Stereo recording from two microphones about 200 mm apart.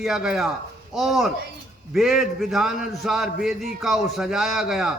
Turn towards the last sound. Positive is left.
turn(degrees=0)  # may be behind; listen again after turning